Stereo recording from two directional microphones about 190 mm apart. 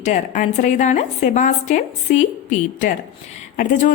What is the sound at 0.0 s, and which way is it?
A woman's voice, 40° left (ahead or behind).